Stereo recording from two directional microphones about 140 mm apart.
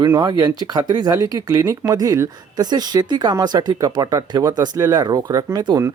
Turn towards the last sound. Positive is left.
turn(degrees=-30)  # may be behind; listen again after turning